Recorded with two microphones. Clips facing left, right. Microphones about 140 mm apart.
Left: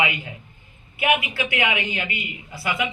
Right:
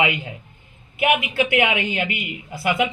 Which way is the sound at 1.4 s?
55° right (ahead or behind).